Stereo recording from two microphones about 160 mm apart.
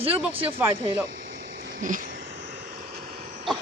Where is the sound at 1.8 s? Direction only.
55° right (ahead or behind).